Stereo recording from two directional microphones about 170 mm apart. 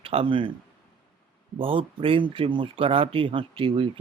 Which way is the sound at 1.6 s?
30° right (ahead or behind).